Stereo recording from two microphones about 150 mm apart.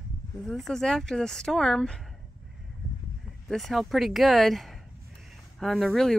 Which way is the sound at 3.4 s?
Centre (ahead or behind).